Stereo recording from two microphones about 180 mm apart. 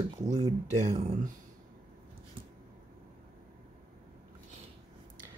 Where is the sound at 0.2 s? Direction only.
40° right (ahead or behind).